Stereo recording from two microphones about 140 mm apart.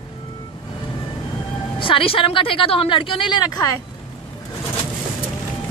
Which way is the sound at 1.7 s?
40° left (ahead or behind).